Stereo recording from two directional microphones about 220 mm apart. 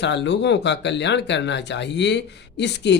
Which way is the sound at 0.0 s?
55° left (ahead or behind).